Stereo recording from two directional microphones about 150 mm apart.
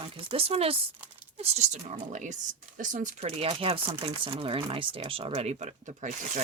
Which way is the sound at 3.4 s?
40° right (ahead or behind).